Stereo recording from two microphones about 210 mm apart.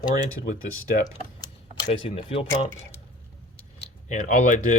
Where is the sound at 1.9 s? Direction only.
30° left (ahead or behind).